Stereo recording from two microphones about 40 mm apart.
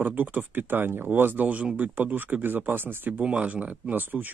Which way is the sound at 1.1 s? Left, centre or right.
Right.